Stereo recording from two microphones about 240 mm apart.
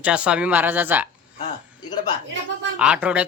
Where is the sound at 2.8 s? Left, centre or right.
Centre.